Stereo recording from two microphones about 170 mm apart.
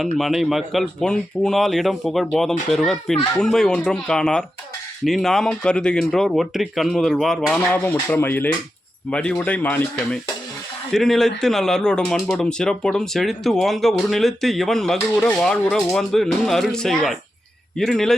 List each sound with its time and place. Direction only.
0.0 s speech: centre (ahead or behind)